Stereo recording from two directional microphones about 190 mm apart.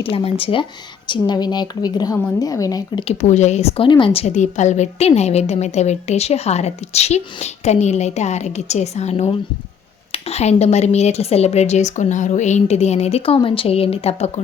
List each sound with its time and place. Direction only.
0.0 s a woman's voice: 30° left (ahead or behind)
3.1 s a woman's voice: 40° left (ahead or behind)